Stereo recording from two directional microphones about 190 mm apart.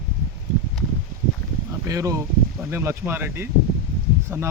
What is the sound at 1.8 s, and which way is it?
Speech, 15° right (ahead or behind).